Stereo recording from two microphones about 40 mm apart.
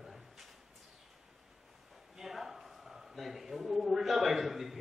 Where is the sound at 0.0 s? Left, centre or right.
Centre.